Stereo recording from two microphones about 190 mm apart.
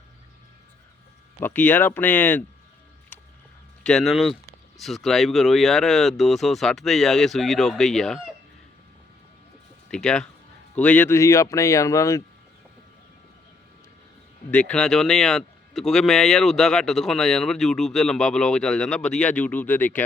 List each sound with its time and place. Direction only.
1.4 s speech: 10° left (ahead or behind)
3.8 s speech: centre (ahead or behind)
9.9 s speech: 5° left (ahead or behind)
14.5 s speech: 5° left (ahead or behind)